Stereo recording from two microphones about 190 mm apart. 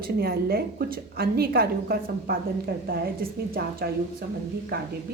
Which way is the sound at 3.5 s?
50° right (ahead or behind).